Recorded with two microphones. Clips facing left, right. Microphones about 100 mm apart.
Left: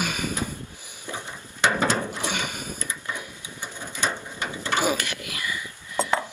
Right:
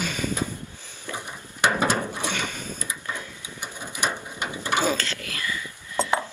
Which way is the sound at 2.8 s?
15° right (ahead or behind).